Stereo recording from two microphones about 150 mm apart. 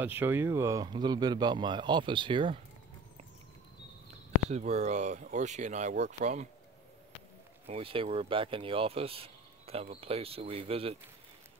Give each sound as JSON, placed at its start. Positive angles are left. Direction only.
{"t": 0.0, "sound": "a man's voice", "side_deg": -15}
{"t": 4.5, "sound": "speech", "side_deg": -45}
{"t": 7.6, "sound": "speech", "side_deg": -40}